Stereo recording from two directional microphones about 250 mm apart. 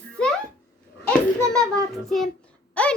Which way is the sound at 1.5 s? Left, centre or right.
Centre.